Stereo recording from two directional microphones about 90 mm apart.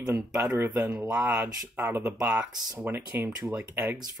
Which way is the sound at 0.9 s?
15° right (ahead or behind).